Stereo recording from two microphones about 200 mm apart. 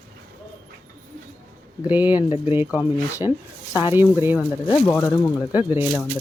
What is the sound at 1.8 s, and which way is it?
Speech, 10° right (ahead or behind).